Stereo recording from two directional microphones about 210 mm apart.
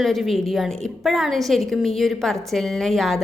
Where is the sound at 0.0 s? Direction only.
Centre (ahead or behind).